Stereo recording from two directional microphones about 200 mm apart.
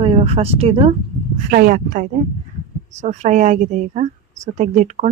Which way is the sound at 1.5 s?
45° right (ahead or behind).